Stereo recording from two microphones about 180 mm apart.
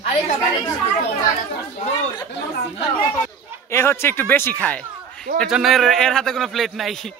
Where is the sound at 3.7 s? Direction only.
15° left (ahead or behind).